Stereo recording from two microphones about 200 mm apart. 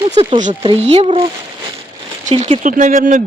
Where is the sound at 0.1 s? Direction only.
30° right (ahead or behind).